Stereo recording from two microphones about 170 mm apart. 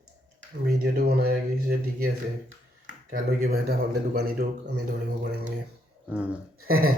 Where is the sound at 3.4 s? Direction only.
65° right (ahead or behind).